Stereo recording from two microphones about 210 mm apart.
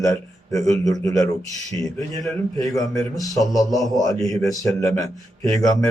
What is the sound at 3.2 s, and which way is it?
Speech, 15° left (ahead or behind).